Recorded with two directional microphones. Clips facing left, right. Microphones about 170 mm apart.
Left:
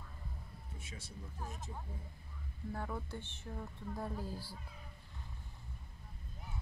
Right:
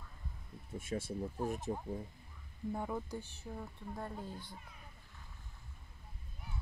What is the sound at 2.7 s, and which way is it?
Speech, 15° right (ahead or behind).